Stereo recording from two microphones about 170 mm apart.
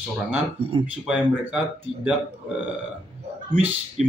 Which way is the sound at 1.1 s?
5° right (ahead or behind).